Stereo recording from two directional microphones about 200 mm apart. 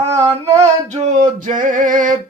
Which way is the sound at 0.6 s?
35° right (ahead or behind).